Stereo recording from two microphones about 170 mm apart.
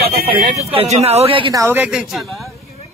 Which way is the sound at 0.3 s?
35° right (ahead or behind).